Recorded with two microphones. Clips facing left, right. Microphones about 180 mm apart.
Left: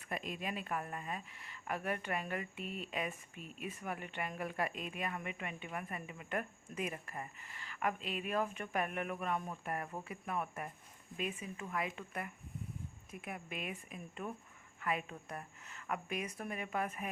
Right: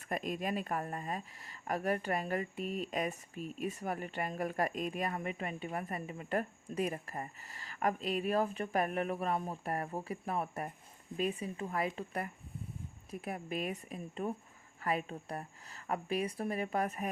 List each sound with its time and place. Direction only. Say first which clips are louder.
0.0 s speech: right 5 dB; 45° right (ahead or behind)